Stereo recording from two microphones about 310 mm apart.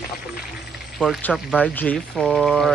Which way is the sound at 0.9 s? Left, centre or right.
Centre.